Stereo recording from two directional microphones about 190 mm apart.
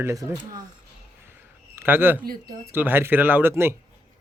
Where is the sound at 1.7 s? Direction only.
10° right (ahead or behind).